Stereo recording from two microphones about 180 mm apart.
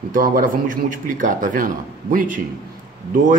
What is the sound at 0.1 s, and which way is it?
A man's voice, 50° right (ahead or behind).